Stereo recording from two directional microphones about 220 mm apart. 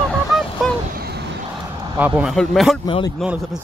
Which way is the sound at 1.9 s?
5° right (ahead or behind).